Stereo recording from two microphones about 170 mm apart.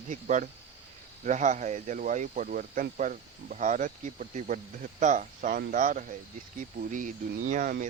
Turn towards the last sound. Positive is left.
turn(degrees=-50)  # may be behind; listen again after turning